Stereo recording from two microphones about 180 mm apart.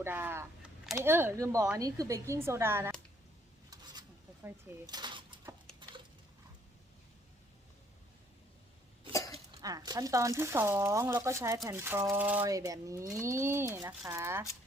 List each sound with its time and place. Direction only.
0.0 s speech: 10° right (ahead or behind)
4.4 s a sound: 25° right (ahead or behind)
9.6 s speech: 20° right (ahead or behind)